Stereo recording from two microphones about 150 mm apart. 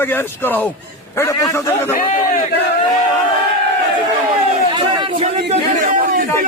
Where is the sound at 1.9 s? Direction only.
65° left (ahead or behind).